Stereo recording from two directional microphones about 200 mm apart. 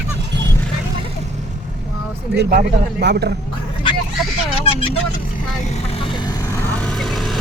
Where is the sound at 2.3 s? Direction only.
50° right (ahead or behind).